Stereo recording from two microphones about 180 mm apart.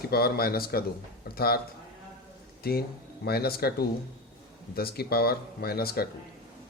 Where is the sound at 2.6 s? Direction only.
60° left (ahead or behind).